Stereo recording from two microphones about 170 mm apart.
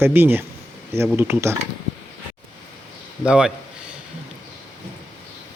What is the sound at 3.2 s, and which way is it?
Speech, 5° right (ahead or behind).